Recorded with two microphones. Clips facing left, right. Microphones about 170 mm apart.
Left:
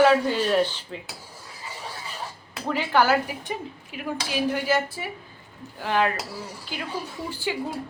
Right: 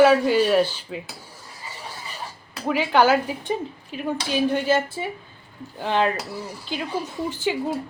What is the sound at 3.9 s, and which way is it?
A woman's voice, 30° right (ahead or behind).